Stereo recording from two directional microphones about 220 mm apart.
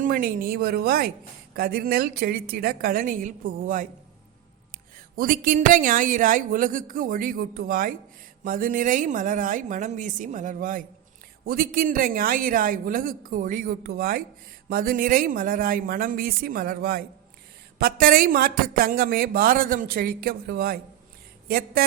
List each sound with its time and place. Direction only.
0.0 s a woman's voice: 40° right (ahead or behind)
5.1 s speech: 40° right (ahead or behind)
21.4 s a sound: 45° right (ahead or behind)